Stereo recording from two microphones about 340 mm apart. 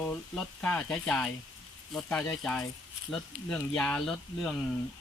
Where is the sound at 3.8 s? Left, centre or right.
Centre.